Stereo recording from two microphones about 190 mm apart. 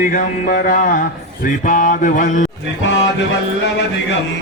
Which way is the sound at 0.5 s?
45° left (ahead or behind).